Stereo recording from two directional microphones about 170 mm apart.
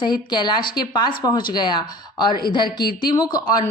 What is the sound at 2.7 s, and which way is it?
Speech, 65° left (ahead or behind).